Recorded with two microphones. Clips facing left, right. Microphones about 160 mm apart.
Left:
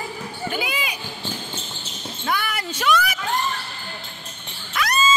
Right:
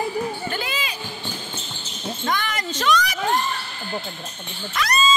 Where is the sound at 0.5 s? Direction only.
10° left (ahead or behind).